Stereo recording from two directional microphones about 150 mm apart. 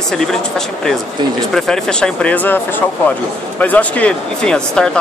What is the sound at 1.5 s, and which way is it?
A man's voice, 5° left (ahead or behind).